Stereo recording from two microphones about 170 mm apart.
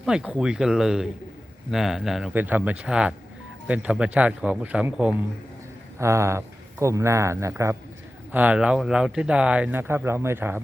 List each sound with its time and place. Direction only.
0.0 s speech: 5° right (ahead or behind)